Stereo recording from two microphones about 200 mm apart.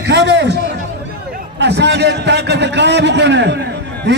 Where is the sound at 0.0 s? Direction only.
60° right (ahead or behind).